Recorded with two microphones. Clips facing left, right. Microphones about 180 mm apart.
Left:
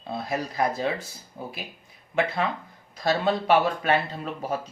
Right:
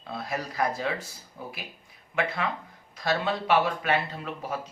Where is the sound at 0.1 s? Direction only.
25° left (ahead or behind).